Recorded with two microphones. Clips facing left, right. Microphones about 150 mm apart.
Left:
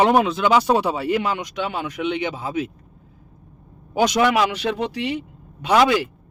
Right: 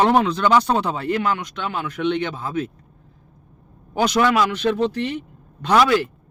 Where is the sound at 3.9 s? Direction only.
10° left (ahead or behind).